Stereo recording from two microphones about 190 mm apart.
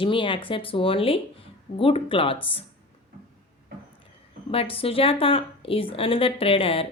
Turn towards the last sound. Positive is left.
turn(degrees=30)  # may be behind; listen again after turning